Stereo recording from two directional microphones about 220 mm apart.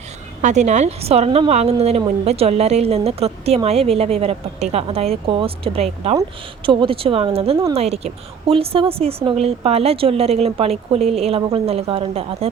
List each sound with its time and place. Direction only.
0.4 s a woman's voice: 30° right (ahead or behind)